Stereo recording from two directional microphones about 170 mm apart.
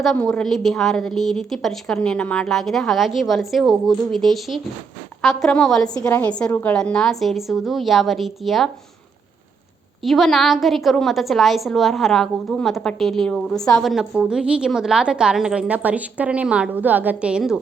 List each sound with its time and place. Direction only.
0.0 s a woman's voice: 5° left (ahead or behind)
5.9 s a woman's voice: 20° left (ahead or behind); by 8.7 s centre (ahead or behind)
10.0 s a woman's voice: centre (ahead or behind)